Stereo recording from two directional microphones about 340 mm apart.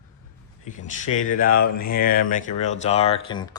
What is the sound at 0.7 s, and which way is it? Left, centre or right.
Speech, left.